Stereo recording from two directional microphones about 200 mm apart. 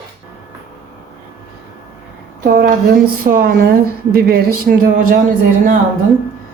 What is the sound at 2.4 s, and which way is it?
A woman's voice, 45° right (ahead or behind).